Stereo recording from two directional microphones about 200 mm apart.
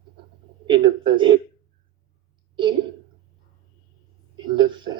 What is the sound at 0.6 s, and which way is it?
Speech, 25° right (ahead or behind).